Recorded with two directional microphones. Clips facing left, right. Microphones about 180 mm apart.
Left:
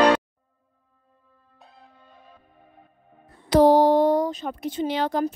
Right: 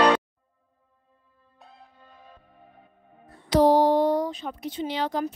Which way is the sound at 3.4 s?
50° left (ahead or behind).